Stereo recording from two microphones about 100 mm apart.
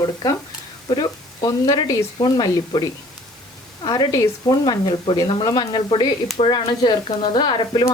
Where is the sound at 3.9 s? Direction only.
40° left (ahead or behind).